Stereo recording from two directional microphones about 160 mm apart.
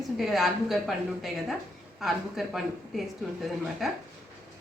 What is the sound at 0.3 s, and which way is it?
Speech, centre (ahead or behind).